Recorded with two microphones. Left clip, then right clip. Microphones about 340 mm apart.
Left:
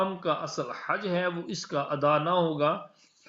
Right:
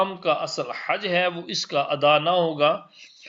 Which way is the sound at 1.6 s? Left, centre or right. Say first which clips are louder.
Right 6 dB; right.